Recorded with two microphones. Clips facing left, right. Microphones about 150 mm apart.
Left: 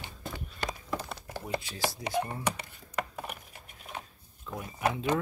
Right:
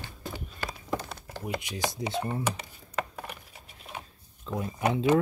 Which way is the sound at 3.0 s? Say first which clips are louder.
Right 1 dB; 5° left (ahead or behind).